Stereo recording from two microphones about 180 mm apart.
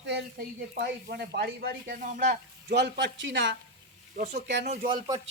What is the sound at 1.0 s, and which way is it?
Speech, 65° right (ahead or behind).